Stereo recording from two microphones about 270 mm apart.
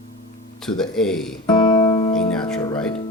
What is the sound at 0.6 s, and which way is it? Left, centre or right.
Speech, centre.